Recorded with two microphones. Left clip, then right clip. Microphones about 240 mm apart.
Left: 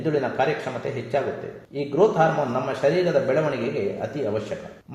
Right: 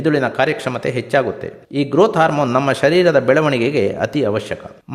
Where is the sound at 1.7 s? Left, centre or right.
Right.